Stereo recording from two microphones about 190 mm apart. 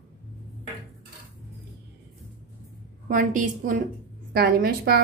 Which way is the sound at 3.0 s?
45° right (ahead or behind).